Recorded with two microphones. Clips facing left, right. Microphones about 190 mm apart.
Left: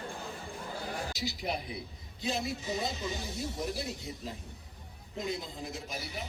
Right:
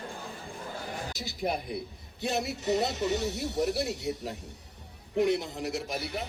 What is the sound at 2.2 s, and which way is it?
Speech, 70° right (ahead or behind).